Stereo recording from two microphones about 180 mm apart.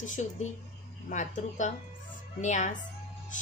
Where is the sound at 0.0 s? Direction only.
45° left (ahead or behind).